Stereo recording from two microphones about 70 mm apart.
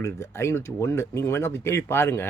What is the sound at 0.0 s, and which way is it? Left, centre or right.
Speech, left.